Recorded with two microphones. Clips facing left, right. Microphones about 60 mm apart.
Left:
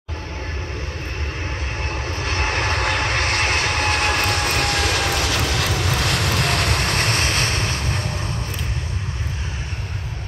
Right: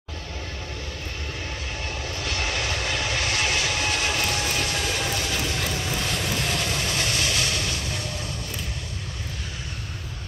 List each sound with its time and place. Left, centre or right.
1.9 s vehicle: left